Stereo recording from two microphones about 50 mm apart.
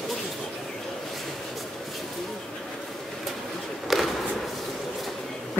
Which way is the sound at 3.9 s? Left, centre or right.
Centre.